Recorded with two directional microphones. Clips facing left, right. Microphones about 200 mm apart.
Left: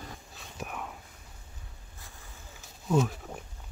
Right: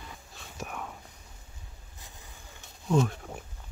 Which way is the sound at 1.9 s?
20° right (ahead or behind).